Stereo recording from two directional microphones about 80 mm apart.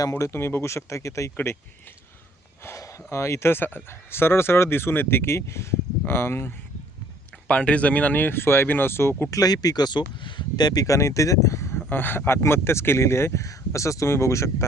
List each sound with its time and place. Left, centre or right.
0.1 s speech: left
2.6 s a sound: left
3.1 s speech: left
7.4 s speech: centre; by 9.3 s left
9.3 s speech: left
10.8 s speech: left
11.9 s speech: left